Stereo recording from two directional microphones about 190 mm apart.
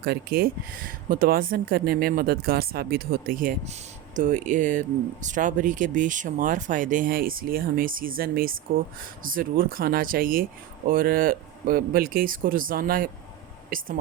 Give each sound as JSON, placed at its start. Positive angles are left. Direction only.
{"t": 0.0, "sound": "speech", "side_deg": -55}